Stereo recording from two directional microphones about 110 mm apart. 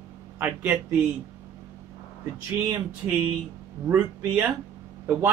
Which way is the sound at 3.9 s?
20° right (ahead or behind).